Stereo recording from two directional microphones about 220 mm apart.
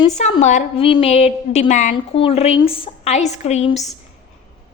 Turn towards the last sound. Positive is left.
turn(degrees=30)  # may be behind; listen again after turning